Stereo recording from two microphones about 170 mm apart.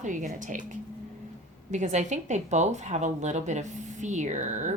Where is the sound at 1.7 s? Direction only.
45° right (ahead or behind).